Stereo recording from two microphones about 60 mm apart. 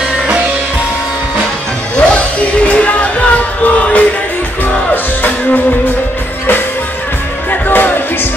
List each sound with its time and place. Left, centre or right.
2.0 s music: centre
7.6 s music: left